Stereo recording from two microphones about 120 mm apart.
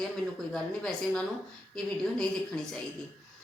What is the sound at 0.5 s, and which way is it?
A woman's voice, 5° left (ahead or behind).